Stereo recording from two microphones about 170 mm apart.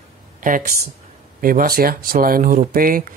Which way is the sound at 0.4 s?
50° right (ahead or behind).